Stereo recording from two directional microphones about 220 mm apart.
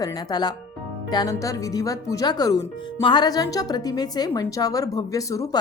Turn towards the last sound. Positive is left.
turn(degrees=15)  # may be behind; listen again after turning